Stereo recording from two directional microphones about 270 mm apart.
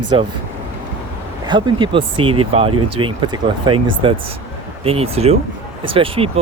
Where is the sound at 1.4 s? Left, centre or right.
Centre.